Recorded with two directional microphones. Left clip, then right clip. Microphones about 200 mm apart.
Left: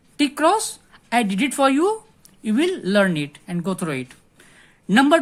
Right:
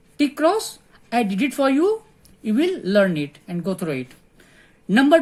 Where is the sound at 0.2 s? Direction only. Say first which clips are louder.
Left 1 dB; 40° left (ahead or behind).